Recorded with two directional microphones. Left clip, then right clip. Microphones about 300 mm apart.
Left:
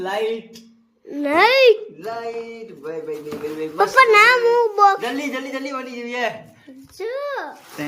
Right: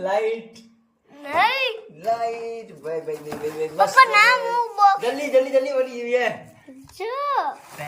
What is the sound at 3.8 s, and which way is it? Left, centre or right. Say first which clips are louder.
A child's voice: left 2 dB; centre.